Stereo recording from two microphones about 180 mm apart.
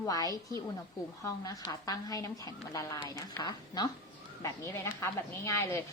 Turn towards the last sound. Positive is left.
turn(degrees=15)  # may be behind; listen again after turning